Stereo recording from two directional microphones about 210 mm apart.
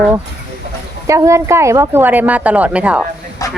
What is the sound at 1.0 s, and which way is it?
A woman's voice, 15° right (ahead or behind).